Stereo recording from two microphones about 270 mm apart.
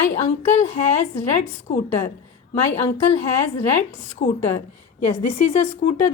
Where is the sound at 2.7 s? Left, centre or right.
Left.